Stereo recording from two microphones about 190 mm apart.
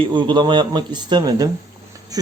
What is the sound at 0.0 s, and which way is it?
Speech, 25° right (ahead or behind).